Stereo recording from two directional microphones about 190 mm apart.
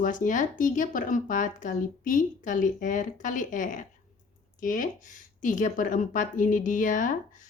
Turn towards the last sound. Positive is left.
turn(degrees=45)  # may be behind; listen again after turning